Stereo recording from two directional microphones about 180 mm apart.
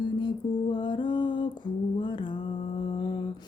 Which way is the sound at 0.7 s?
25° left (ahead or behind).